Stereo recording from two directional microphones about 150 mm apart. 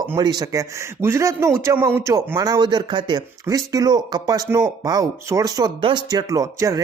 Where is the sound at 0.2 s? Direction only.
25° right (ahead or behind).